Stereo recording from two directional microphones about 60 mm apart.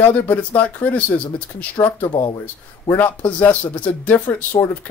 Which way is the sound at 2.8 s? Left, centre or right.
Left.